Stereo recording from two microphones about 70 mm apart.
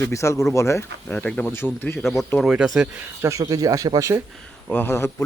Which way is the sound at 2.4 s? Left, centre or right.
Centre.